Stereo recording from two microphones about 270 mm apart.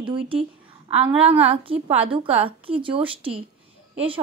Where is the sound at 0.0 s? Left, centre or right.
Centre.